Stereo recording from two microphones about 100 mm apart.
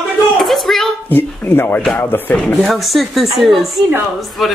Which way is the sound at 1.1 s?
20° left (ahead or behind).